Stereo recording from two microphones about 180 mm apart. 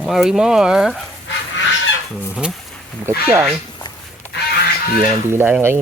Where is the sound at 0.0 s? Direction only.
5° right (ahead or behind).